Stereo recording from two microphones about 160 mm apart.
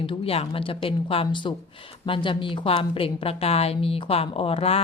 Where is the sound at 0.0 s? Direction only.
35° left (ahead or behind).